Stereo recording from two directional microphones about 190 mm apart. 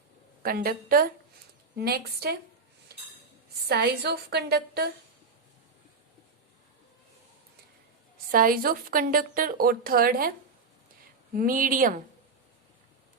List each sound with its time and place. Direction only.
0.4 s a woman's voice: 50° right (ahead or behind)
2.9 s chink: 55° right (ahead or behind)
3.7 s a woman's voice: 55° right (ahead or behind)
8.3 s a woman's voice: 50° right (ahead or behind)
11.3 s a woman's voice: 45° right (ahead or behind)